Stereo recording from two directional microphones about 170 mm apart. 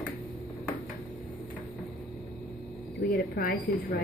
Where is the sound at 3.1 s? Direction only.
65° left (ahead or behind).